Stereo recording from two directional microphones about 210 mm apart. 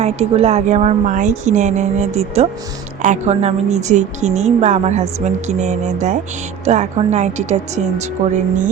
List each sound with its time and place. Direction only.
0.0 s a woman's voice: 30° right (ahead or behind)